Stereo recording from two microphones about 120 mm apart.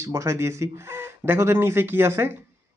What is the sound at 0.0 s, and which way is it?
Speech, 25° right (ahead or behind).